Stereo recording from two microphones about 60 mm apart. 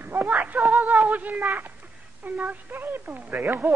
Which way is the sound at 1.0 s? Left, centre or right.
Right.